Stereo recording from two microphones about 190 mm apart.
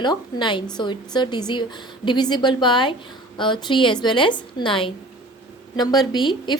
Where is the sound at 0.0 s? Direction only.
25° left (ahead or behind).